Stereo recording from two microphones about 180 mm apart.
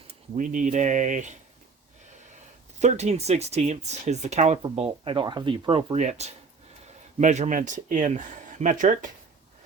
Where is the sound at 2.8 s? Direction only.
40° right (ahead or behind).